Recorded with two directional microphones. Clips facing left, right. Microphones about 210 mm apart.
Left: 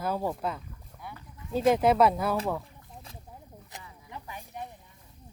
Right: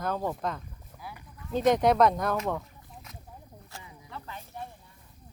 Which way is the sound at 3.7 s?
20° left (ahead or behind).